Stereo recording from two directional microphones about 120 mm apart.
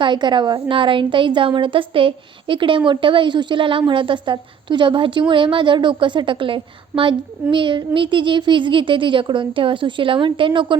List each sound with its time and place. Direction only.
0.0 s a woman's voice: 40° right (ahead or behind)